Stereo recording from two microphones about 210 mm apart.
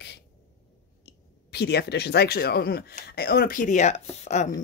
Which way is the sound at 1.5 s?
50° left (ahead or behind).